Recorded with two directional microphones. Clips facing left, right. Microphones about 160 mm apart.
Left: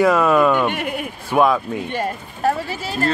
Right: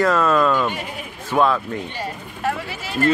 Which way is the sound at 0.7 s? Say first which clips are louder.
Left 6 dB; 60° left (ahead or behind).